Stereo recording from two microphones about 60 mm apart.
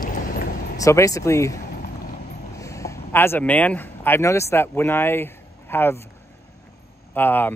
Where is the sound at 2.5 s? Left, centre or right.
Left.